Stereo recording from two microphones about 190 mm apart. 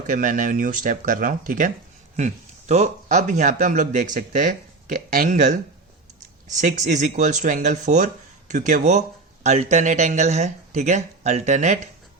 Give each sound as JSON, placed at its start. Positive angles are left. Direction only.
{"t": 0.1, "sound": "speech", "side_deg": -45}
{"t": 6.6, "sound": "speech", "side_deg": -40}